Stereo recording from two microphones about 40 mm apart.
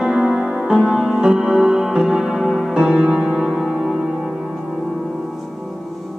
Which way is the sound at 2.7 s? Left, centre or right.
Right.